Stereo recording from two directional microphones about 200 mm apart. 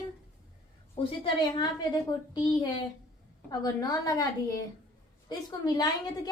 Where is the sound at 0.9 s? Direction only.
25° left (ahead or behind).